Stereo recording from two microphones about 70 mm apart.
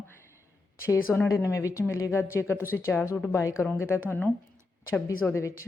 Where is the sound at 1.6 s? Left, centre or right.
Left.